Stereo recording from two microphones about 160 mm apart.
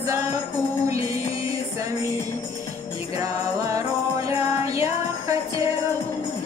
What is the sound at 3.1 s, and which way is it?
Jingle bell, 20° right (ahead or behind).